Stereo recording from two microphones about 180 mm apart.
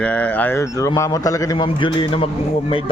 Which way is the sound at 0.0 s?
10° left (ahead or behind).